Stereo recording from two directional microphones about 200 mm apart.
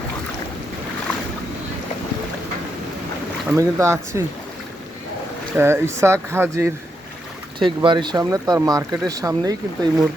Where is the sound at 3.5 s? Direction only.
15° right (ahead or behind).